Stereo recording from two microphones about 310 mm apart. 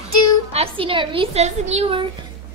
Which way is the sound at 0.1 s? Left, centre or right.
Left.